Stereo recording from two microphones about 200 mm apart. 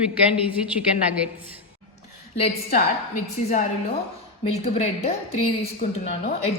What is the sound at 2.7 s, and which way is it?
A woman's voice, 35° left (ahead or behind).